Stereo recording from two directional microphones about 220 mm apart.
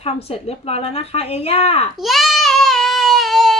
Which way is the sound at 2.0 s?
Centre (ahead or behind).